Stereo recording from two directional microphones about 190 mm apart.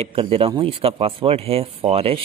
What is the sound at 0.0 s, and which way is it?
Speech, 30° right (ahead or behind).